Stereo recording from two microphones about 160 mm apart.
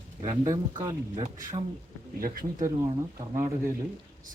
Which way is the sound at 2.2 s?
60° right (ahead or behind).